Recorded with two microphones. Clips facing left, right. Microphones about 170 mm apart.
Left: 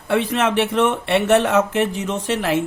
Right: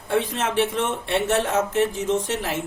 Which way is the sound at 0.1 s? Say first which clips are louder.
Left 4 dB; 65° left (ahead or behind).